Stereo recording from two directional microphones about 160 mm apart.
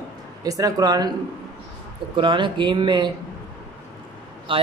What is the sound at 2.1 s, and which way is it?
Speech, 30° right (ahead or behind).